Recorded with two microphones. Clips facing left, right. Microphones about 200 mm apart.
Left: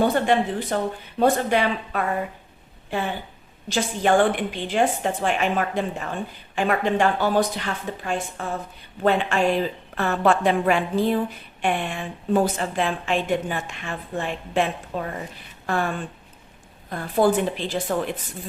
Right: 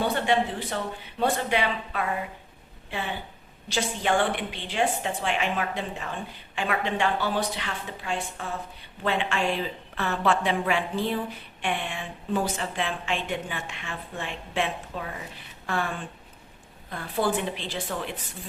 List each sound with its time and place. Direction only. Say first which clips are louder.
0.0 s a woman's voice: left 5 dB; 45° left (ahead or behind)
3.7 s a woman's voice: left 5 dB; 45° left (ahead or behind)
16.9 s a woman's voice: left 7 dB; 45° left (ahead or behind)